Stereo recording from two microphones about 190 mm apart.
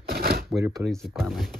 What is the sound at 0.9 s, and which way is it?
Speech, centre (ahead or behind).